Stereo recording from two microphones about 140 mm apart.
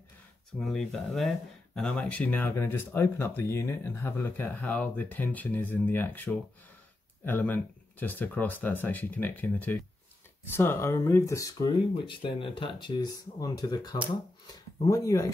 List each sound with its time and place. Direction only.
0.6 s speech: centre (ahead or behind); by 15.3 s 25° left (ahead or behind)